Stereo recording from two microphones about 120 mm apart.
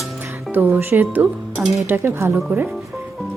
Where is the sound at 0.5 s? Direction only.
15° right (ahead or behind).